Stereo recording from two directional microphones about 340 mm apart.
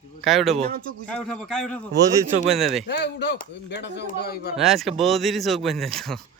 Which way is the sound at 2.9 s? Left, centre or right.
Left.